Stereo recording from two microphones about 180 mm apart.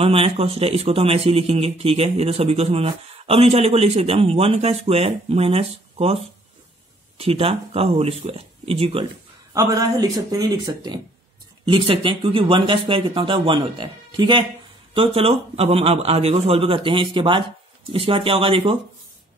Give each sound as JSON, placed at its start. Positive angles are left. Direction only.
{"t": 0.0, "sound": "a man's voice", "side_deg": -30}
{"t": 9.5, "sound": "a man's voice", "side_deg": -20}